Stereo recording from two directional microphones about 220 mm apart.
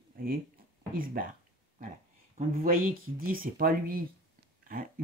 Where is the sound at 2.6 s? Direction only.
40° right (ahead or behind).